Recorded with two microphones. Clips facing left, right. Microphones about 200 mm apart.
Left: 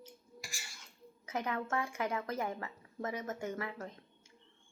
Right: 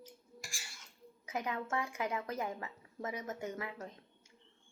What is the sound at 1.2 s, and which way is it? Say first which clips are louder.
A woman's voice: left 2 dB; 15° right (ahead or behind).